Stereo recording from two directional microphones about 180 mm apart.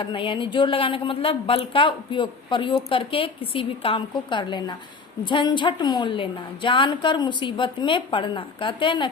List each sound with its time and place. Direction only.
0.0 s a woman's voice: 30° left (ahead or behind)